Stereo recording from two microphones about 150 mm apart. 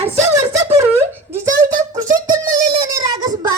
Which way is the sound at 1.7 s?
30° right (ahead or behind).